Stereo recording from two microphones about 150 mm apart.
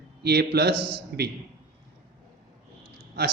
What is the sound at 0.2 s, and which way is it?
Speech, 90° right.